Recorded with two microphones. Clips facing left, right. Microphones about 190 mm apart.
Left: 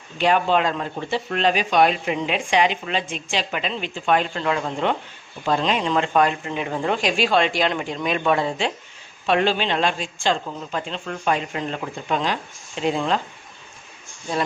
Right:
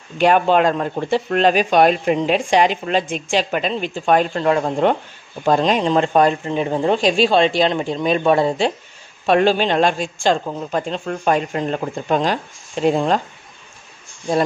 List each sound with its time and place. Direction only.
0.2 s speech: 50° right (ahead or behind)